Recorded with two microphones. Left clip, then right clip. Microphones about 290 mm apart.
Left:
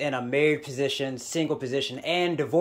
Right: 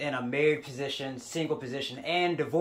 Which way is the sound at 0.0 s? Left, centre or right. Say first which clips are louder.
Left 3 dB; left.